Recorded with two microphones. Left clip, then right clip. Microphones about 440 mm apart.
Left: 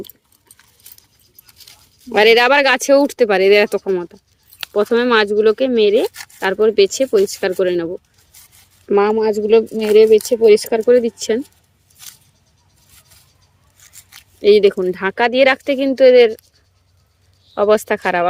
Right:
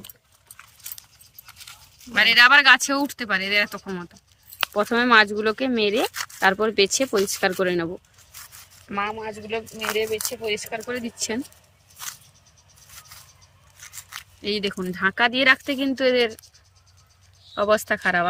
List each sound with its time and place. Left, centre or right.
2.1 s speech: centre
9.0 s speech: left
10.8 s speech: centre
14.4 s speech: centre
17.5 s speech: centre